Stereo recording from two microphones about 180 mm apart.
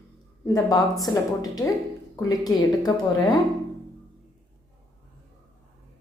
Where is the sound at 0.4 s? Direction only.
20° left (ahead or behind).